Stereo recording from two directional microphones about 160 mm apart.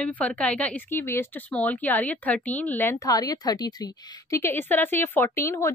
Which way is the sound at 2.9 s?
25° left (ahead or behind).